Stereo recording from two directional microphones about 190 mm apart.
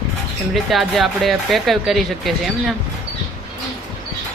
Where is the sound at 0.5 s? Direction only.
Centre (ahead or behind).